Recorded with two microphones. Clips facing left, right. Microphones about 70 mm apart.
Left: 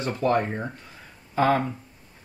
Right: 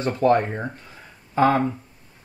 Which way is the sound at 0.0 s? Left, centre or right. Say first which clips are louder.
Right 4 dB; right.